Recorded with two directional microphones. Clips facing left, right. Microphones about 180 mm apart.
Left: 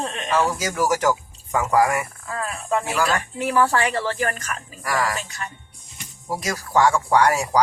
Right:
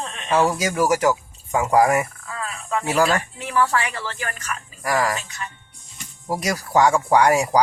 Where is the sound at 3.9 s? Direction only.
40° left (ahead or behind).